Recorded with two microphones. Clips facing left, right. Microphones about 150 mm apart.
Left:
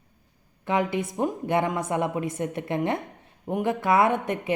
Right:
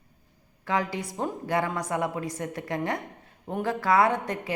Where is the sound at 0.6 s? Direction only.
20° left (ahead or behind).